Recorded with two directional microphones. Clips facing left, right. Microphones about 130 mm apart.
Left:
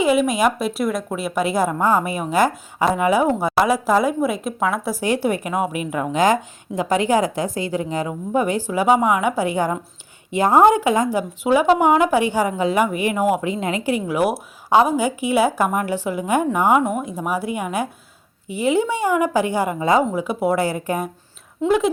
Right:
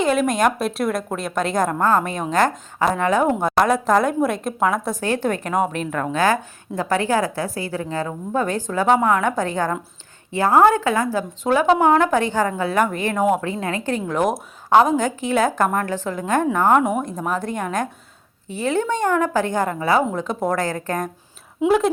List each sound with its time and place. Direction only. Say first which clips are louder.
0.0 s speech: left 1 dB; 5° left (ahead or behind)
13.5 s speech: left 2 dB; 15° left (ahead or behind)
21.6 s speech: right 1 dB; 10° right (ahead or behind)